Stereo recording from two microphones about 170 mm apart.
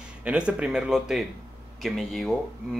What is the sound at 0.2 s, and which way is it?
Speech, 5° right (ahead or behind).